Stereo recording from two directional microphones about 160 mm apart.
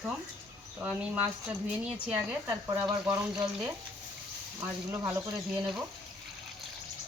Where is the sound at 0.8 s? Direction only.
10° right (ahead or behind).